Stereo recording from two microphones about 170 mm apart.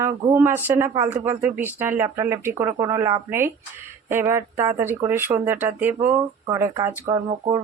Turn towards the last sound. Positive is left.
turn(degrees=-25)  # may be behind; listen again after turning